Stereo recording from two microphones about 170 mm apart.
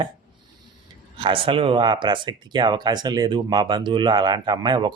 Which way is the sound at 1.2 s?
30° right (ahead or behind).